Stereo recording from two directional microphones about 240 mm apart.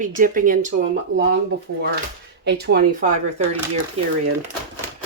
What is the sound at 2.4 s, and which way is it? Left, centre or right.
Speech, right.